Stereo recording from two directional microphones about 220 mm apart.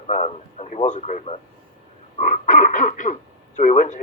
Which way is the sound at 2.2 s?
35° left (ahead or behind).